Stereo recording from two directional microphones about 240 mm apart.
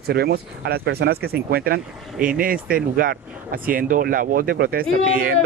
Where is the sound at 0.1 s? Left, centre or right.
Right.